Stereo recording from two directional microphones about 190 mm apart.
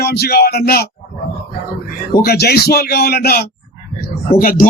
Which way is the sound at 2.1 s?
55° left (ahead or behind).